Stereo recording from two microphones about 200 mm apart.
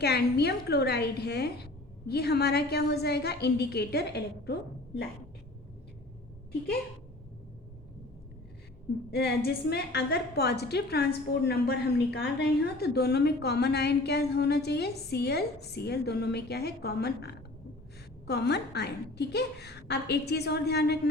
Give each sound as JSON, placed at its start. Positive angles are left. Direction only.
{"t": 0.0, "sound": "a woman's voice", "side_deg": 55}
{"t": 9.0, "sound": "a woman's voice", "side_deg": 55}